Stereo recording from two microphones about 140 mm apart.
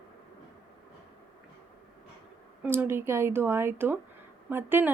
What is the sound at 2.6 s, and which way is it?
A woman's voice, 15° right (ahead or behind).